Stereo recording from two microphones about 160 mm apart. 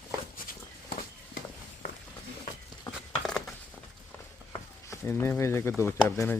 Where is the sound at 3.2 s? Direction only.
5° left (ahead or behind).